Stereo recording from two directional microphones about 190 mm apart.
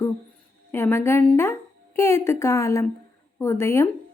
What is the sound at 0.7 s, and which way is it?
A woman's voice, 10° left (ahead or behind).